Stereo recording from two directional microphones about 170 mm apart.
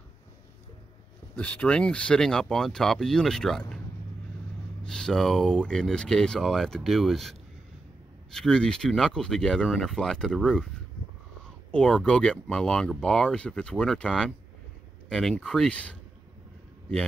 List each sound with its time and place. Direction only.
1.3 s speech: 10° left (ahead or behind)
4.8 s speech: 5° left (ahead or behind)
11.7 s speech: 5° left (ahead or behind)